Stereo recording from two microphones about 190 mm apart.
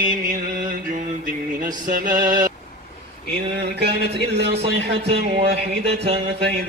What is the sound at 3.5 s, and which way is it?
Speech, 60° right (ahead or behind).